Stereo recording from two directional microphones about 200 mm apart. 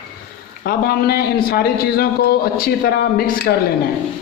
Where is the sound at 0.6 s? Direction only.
50° left (ahead or behind).